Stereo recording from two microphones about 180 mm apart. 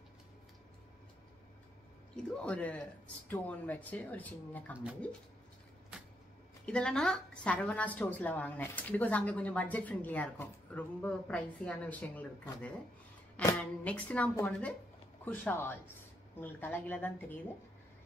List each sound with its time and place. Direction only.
2.3 s a woman's voice: 5° left (ahead or behind)
6.6 s a woman's voice: 5° left (ahead or behind)